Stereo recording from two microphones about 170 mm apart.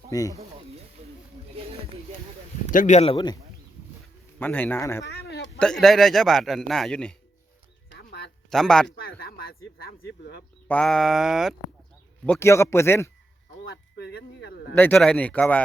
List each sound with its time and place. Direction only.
0.1 s speech: 20° left (ahead or behind)
2.7 s speech: 45° left (ahead or behind)
4.4 s speech: 10° left (ahead or behind)
5.0 s a sound: 70° left (ahead or behind)
5.5 s a man's voice: 5° left (ahead or behind)
7.9 s a sound: 75° left (ahead or behind)
8.4 s a man's voice: 5° left (ahead or behind)
9.0 s speech: 65° left (ahead or behind)
10.7 s a man's voice: 5° left (ahead or behind)
12.2 s speech: 10° left (ahead or behind)
13.9 s a sound: 80° left
14.8 s speech: 5° left (ahead or behind)